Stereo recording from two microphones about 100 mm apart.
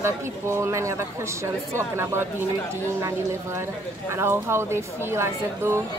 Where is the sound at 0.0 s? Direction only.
30° right (ahead or behind).